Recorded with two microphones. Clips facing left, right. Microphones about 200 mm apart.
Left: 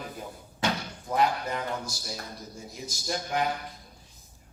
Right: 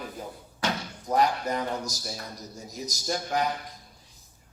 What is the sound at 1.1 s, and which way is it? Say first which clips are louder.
A man's voice: right 2 dB; 40° right (ahead or behind).